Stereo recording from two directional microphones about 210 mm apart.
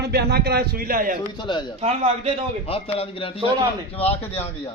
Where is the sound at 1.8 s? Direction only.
30° right (ahead or behind).